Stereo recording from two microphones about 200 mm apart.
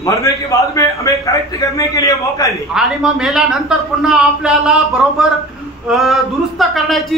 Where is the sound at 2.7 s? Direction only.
5° right (ahead or behind).